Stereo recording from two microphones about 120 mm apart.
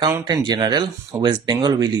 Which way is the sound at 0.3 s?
35° right (ahead or behind).